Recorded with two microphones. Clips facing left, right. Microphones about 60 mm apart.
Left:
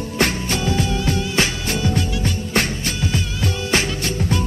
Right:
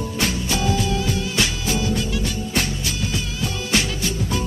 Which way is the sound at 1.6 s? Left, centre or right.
Left.